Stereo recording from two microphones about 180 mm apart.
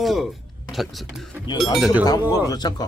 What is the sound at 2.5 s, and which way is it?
Speech, 25° left (ahead or behind).